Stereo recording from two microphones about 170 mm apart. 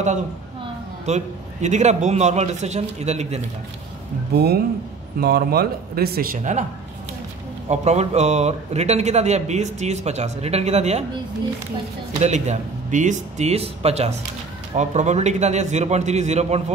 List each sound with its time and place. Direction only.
1.0 s speech: 45° right (ahead or behind)
4.3 s speech: 70° right (ahead or behind); by 6.6 s 50° right (ahead or behind)
7.6 s speech: 40° right (ahead or behind)
12.2 s speech: 45° right (ahead or behind)